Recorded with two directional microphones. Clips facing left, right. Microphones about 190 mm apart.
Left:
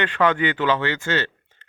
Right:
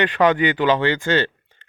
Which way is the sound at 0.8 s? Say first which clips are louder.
Right 5 dB; 30° right (ahead or behind).